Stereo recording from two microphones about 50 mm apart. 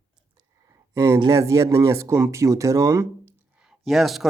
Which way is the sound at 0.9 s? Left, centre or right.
Right.